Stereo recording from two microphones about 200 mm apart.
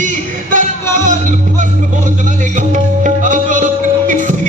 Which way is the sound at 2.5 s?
40° right (ahead or behind).